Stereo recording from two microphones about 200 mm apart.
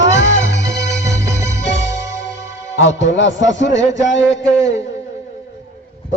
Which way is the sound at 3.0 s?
65° left (ahead or behind).